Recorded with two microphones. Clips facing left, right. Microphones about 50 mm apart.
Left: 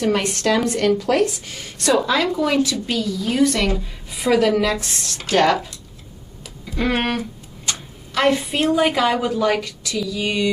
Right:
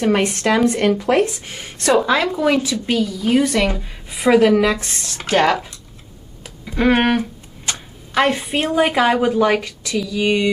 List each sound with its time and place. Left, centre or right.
0.0 s a woman's voice: right
6.7 s a sound: right
8.1 s a woman's voice: right